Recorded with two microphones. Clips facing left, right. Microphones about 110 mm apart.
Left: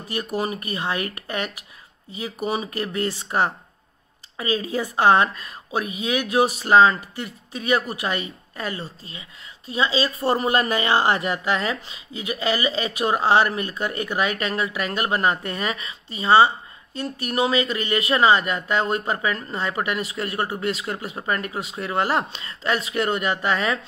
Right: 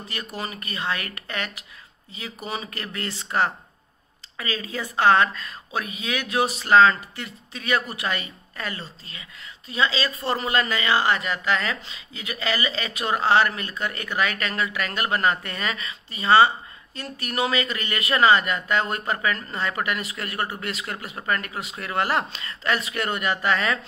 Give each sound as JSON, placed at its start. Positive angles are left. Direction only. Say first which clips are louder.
{"t": 0.1, "sound": "speech", "louder": "left 8 dB", "side_deg": 10}
{"t": 10.4, "sound": "a woman's voice", "louder": "left 3 dB", "side_deg": 30}
{"t": 11.5, "sound": "speech", "louder": "left 2 dB", "side_deg": 10}